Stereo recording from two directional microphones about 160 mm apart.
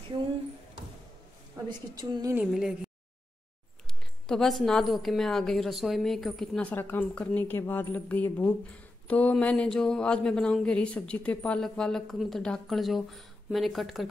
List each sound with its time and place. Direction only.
1.7 s a woman's voice: 25° right (ahead or behind)
2.3 s a woman's voice: 5° right (ahead or behind)
4.3 s a woman's voice: centre (ahead or behind)